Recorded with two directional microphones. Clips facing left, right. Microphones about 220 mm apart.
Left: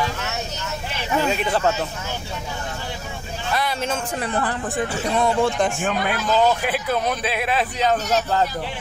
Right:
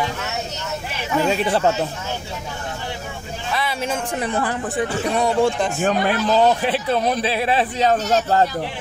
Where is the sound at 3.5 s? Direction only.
5° right (ahead or behind).